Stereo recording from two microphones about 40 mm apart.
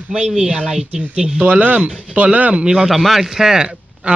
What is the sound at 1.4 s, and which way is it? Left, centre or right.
Speech, right.